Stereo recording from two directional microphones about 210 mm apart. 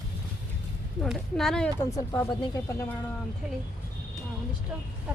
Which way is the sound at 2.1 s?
15° left (ahead or behind).